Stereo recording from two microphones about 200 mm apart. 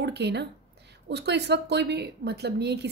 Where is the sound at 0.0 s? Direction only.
55° right (ahead or behind).